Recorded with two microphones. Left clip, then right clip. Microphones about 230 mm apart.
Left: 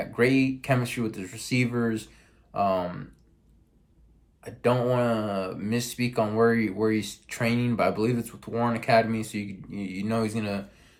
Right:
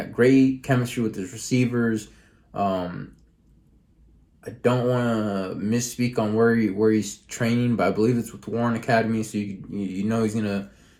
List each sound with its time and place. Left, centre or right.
0.3 s speech: left
4.4 s speech: left